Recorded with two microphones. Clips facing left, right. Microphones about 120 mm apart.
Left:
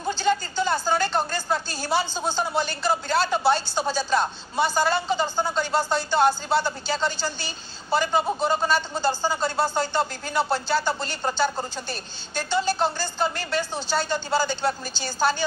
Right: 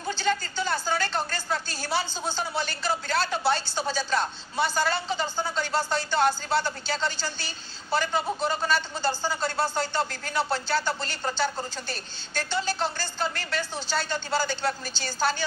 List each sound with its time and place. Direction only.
0.0 s speech: 15° left (ahead or behind)